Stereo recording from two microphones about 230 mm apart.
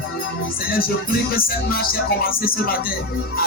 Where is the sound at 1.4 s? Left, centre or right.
Left.